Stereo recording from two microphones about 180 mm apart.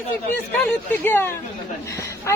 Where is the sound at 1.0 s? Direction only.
10° left (ahead or behind).